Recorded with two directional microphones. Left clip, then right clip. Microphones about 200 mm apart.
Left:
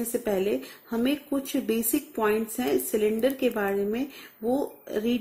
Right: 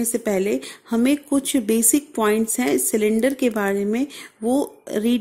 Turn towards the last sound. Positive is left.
turn(degrees=-40)  # may be behind; listen again after turning